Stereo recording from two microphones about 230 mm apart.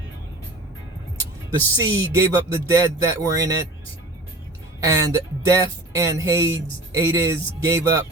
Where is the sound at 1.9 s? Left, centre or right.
Centre.